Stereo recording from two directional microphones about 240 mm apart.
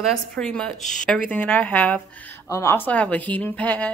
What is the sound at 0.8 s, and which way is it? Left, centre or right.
Speech, left.